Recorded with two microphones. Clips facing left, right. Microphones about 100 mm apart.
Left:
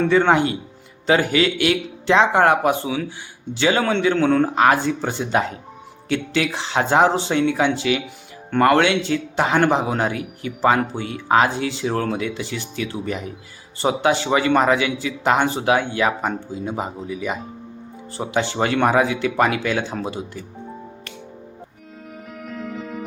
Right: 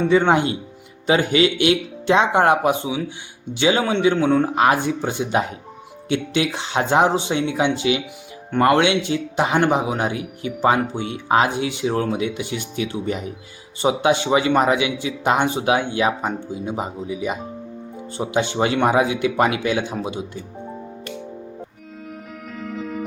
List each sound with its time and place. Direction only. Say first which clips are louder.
0.0 s speech: even; 20° right (ahead or behind)
22.1 s music: left 3 dB; centre (ahead or behind)